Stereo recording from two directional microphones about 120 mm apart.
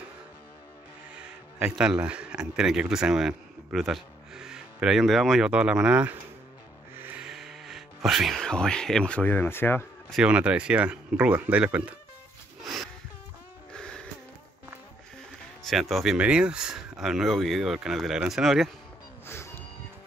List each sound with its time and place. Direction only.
1.1 s speech: 10° right (ahead or behind)
7.0 s vehicle: 15° right (ahead or behind)
7.2 s speech: 5° right (ahead or behind); by 9.8 s 20° left (ahead or behind)
10.2 s speech: 10° right (ahead or behind)
12.6 s a sound: centre (ahead or behind)
13.7 s music: 5° left (ahead or behind)
15.6 s speech: centre (ahead or behind)
19.2 s a sound: 20° left (ahead or behind)